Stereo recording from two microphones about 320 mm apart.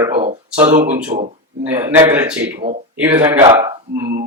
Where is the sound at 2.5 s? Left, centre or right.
Right.